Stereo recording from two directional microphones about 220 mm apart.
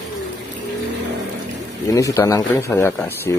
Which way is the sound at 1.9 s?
15° left (ahead or behind).